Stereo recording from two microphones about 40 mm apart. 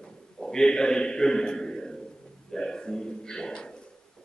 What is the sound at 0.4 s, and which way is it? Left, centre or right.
A man's voice, centre.